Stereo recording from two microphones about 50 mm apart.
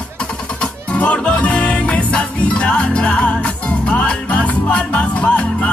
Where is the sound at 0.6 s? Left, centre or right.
Left.